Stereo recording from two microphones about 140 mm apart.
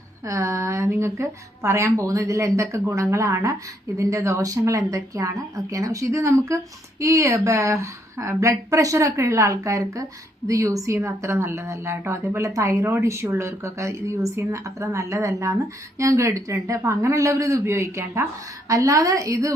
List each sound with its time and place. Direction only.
0.3 s speech: 20° right (ahead or behind)